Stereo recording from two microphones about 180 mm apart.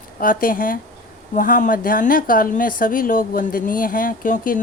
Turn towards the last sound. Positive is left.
turn(degrees=50)  # may be behind; listen again after turning